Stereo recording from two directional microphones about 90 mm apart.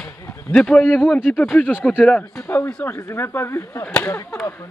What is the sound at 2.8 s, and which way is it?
Speech, 25° left (ahead or behind).